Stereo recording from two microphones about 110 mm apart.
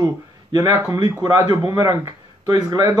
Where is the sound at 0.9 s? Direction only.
35° right (ahead or behind).